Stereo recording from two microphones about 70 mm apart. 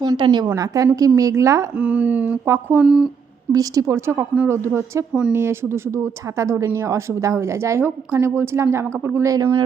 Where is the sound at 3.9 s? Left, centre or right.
Right.